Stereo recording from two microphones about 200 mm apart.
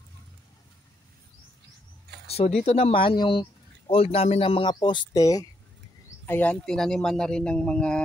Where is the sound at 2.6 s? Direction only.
30° left (ahead or behind).